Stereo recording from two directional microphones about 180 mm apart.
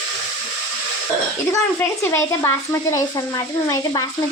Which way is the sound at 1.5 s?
15° left (ahead or behind).